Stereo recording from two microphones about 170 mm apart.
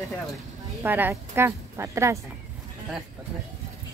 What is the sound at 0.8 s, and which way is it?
A woman's voice, 10° right (ahead or behind).